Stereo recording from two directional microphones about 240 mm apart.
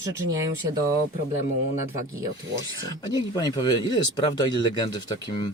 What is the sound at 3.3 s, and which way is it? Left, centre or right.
Speech, centre.